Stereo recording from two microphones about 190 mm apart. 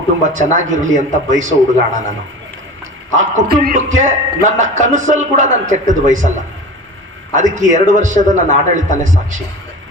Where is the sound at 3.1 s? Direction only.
45° right (ahead or behind).